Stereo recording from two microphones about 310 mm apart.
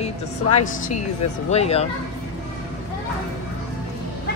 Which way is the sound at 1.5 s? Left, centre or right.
Centre.